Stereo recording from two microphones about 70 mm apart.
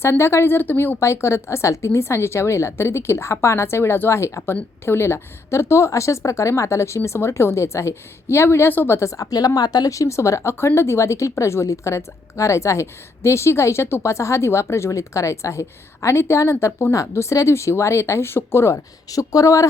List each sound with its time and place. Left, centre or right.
0.0 s speech: left
0.9 s speech: left
9.0 s speech: left